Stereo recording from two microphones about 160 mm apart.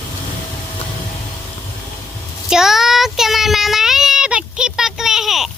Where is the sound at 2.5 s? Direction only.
Centre (ahead or behind).